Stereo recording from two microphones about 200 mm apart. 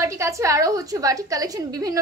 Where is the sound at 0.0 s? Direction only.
15° right (ahead or behind).